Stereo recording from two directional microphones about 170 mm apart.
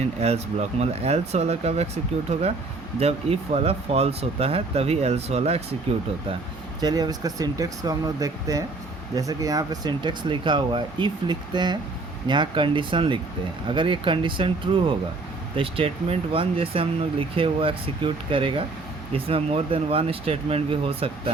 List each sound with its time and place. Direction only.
0.0 s speech: 40° right (ahead or behind)
6.8 s speech: 25° right (ahead or behind)